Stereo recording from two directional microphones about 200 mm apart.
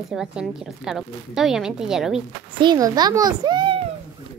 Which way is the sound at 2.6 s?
20° right (ahead or behind).